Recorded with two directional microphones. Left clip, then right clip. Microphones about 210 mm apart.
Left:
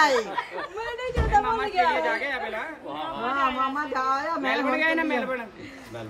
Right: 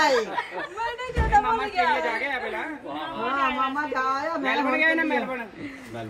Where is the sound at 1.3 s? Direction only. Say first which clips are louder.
Right 1 dB; 25° left (ahead or behind).